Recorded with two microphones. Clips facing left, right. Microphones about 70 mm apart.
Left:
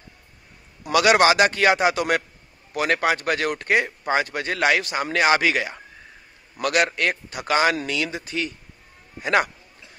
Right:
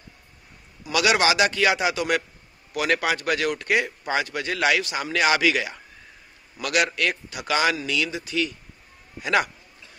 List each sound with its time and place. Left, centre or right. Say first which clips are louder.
0.9 s speech: left 4 dB; left